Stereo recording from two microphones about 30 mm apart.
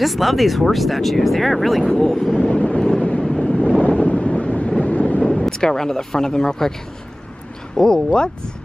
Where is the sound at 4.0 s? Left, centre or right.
Left.